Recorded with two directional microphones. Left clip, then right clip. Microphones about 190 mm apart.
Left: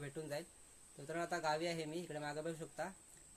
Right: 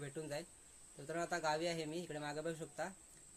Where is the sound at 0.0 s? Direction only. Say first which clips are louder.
Even; centre (ahead or behind).